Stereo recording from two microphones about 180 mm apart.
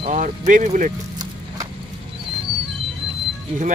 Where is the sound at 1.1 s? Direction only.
20° right (ahead or behind).